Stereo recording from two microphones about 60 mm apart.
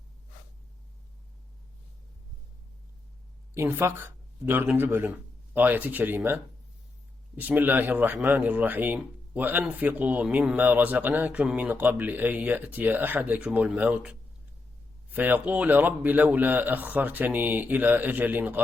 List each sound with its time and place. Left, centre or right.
3.8 s speech: right
15.1 s speech: right